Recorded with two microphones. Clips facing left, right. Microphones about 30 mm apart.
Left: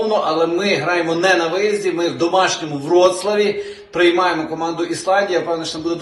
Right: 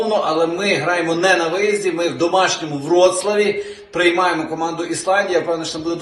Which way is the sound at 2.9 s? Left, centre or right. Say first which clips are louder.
Even; right.